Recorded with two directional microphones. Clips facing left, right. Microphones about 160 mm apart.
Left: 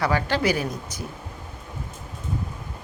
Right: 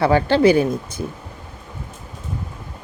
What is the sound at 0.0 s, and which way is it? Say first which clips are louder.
Speech: right 9 dB; 30° right (ahead or behind).